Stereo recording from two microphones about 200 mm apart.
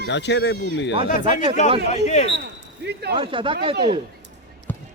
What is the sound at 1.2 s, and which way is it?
Speech, 25° right (ahead or behind).